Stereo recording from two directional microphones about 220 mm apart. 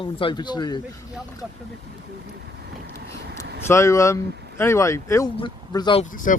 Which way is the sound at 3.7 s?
15° left (ahead or behind).